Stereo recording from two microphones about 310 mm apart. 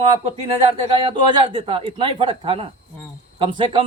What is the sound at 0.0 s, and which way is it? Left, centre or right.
A man's voice, centre.